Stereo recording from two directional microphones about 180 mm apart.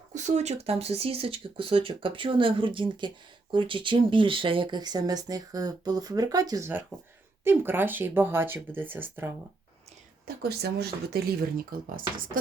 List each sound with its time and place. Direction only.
0.1 s speech: 40° right (ahead or behind); by 9.3 s 10° right (ahead or behind)
10.2 s speech: 60° right (ahead or behind)